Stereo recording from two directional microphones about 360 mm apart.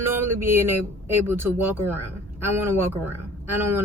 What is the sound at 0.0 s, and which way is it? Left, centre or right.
Speech, centre.